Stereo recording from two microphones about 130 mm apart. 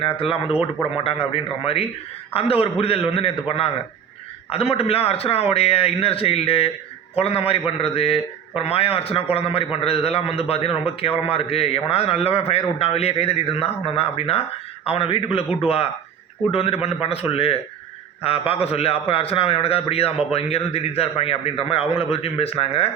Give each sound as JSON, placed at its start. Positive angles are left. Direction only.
{"t": 0.0, "sound": "a man's voice", "side_deg": 45}
{"t": 16.5, "sound": "a man's voice", "side_deg": 50}